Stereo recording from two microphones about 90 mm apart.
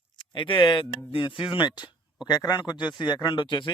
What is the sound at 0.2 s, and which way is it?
Speech, 65° left (ahead or behind).